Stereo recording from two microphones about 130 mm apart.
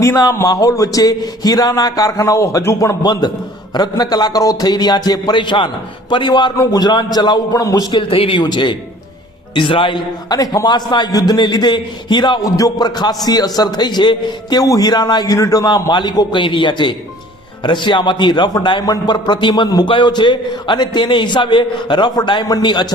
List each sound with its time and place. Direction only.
0.0 s a man's voice: 25° left (ahead or behind)
3.0 s a man's voice: 35° left (ahead or behind)